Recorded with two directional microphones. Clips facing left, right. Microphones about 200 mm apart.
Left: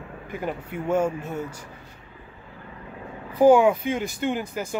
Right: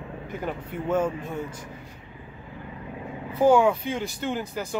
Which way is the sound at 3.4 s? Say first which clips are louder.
Left 3 dB; 10° left (ahead or behind).